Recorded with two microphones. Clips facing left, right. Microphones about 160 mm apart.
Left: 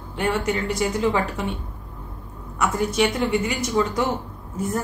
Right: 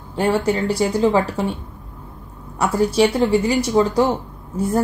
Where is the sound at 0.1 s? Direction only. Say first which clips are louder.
Right 5 dB; 30° right (ahead or behind).